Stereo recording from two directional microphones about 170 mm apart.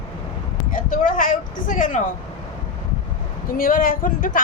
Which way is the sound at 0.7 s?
55° left (ahead or behind).